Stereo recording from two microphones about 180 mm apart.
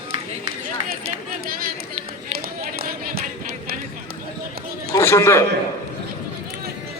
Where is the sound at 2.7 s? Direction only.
55° right (ahead or behind).